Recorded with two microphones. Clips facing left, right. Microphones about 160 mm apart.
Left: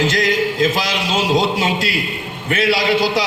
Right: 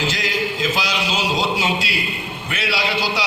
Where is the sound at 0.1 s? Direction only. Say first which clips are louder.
Left 6 dB; 50° left (ahead or behind).